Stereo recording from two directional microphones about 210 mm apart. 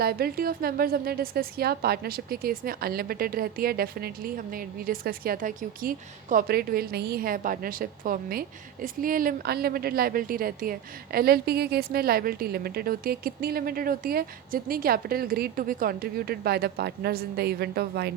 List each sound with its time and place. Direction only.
0.0 s a woman's voice: 45° right (ahead or behind)